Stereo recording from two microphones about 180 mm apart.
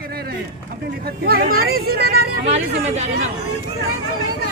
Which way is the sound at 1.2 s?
55° right (ahead or behind).